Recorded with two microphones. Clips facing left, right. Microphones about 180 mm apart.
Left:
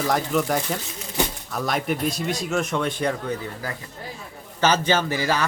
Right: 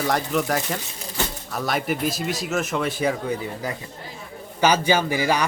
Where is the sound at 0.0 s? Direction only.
Centre (ahead or behind).